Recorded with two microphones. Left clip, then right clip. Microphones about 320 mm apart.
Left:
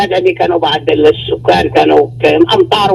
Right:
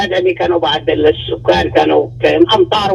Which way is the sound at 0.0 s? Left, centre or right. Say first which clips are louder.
Left 3 dB; left.